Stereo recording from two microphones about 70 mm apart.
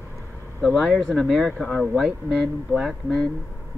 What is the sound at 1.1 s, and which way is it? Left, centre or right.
Speech, centre.